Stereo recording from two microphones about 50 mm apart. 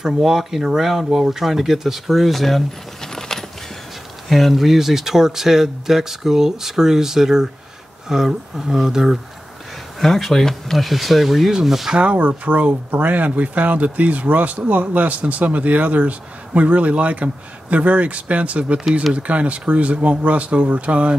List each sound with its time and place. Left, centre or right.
0.0 s speech: centre
9.9 s speech: centre
12.0 s speech: right